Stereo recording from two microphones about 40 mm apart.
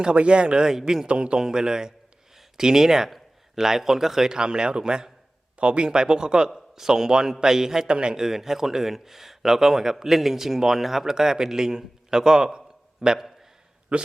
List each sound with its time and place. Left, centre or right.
0.0 s speech: right
0.7 s speech: centre
1.0 s speech: right
7.9 s speech: right
8.2 s speech: centre
13.9 s a man's voice: right